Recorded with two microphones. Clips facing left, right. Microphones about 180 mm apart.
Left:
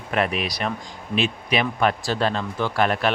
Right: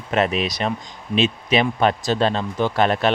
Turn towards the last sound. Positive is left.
turn(degrees=-25)  # may be behind; listen again after turning